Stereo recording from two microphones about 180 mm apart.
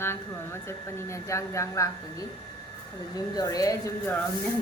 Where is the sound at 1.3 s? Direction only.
15° left (ahead or behind).